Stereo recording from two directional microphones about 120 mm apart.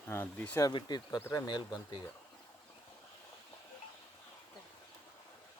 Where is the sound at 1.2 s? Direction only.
20° left (ahead or behind).